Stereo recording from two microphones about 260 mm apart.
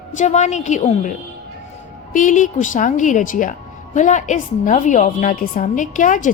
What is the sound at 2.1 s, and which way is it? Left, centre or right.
A woman's voice, left.